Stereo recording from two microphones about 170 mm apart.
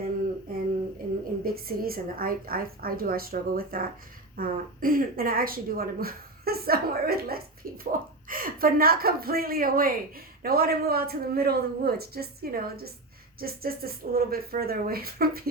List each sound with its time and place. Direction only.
1.5 s speech: 60° right (ahead or behind)
7.9 s speech: 50° right (ahead or behind)